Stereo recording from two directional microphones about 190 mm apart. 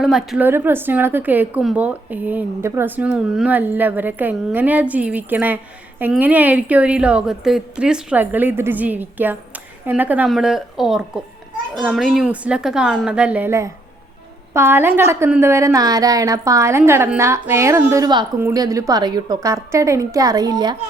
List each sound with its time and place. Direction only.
0.0 s a woman's voice: centre (ahead or behind); by 20.7 s 20° right (ahead or behind)